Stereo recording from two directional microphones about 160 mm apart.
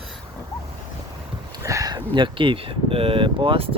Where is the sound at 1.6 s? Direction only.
20° right (ahead or behind).